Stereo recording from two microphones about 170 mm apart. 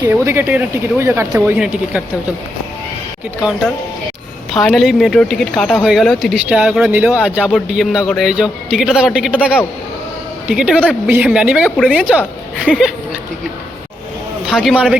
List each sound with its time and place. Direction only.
0.0 s speech: 15° right (ahead or behind)
4.5 s speech: centre (ahead or behind)
10.4 s speech: 5° right (ahead or behind)
14.4 s a man's voice: centre (ahead or behind)